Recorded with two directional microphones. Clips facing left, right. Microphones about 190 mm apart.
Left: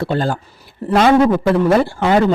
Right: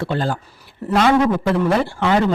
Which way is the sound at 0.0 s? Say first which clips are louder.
Left 3 dB; 40° left (ahead or behind).